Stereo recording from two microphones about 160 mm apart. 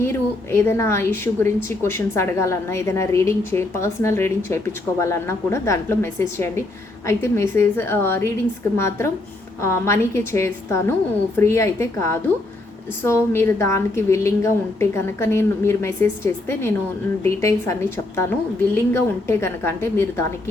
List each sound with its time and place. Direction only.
0.0 s a woman's voice: 15° left (ahead or behind)
9.6 s a woman's voice: 15° left (ahead or behind)